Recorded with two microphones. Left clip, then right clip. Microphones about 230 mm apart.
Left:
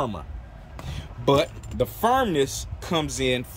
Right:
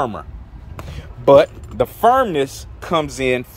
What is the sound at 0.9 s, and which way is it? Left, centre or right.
Speech, centre.